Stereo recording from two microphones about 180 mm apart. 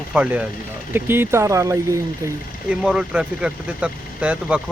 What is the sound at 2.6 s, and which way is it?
Speech, 5° right (ahead or behind).